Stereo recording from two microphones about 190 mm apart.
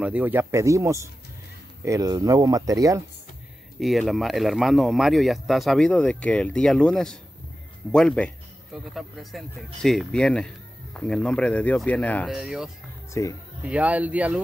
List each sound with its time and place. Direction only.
0.0 s speech: 10° right (ahead or behind)
3.8 s speech: centre (ahead or behind)
13.1 s speech: 15° left (ahead or behind)
13.7 s speech: 5° right (ahead or behind)